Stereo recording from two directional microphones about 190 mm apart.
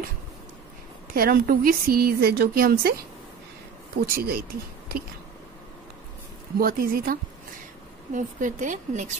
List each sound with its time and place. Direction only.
1.1 s speech: 50° right (ahead or behind)
4.0 s speech: 55° right (ahead or behind)
6.6 s speech: 50° right (ahead or behind)